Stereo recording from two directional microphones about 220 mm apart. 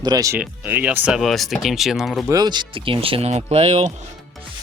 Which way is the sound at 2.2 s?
15° right (ahead or behind).